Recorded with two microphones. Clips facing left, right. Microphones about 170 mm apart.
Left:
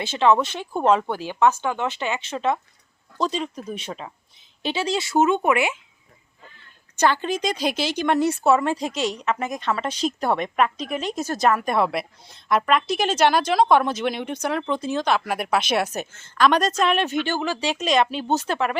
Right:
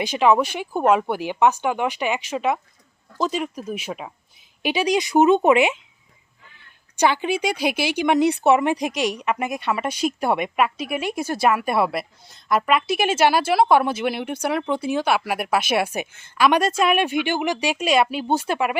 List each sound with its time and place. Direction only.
0.0 s speech: 15° right (ahead or behind)
6.9 s speech: 15° right (ahead or behind)